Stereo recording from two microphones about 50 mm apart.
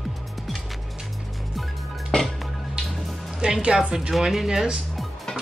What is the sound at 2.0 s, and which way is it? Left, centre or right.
Music, centre.